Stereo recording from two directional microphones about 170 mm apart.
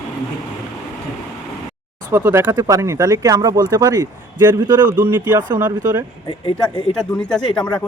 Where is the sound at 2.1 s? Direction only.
15° right (ahead or behind).